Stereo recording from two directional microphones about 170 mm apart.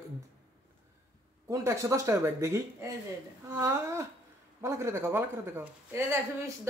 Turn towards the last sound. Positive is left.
turn(degrees=-15)  # may be behind; listen again after turning